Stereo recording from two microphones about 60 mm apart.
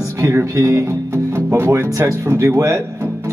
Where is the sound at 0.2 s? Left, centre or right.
Right.